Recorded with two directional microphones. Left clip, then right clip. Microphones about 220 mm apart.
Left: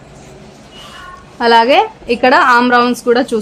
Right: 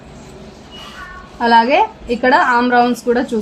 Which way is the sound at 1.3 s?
35° left (ahead or behind).